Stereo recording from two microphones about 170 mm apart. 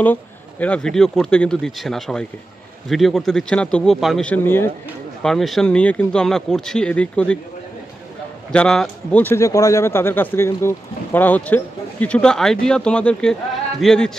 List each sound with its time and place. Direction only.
0.0 s speech: 10° left (ahead or behind)
5.2 s speech: centre (ahead or behind)
8.5 s a man's voice: 5° left (ahead or behind)